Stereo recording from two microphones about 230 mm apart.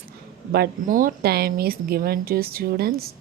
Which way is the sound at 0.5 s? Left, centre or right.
Right.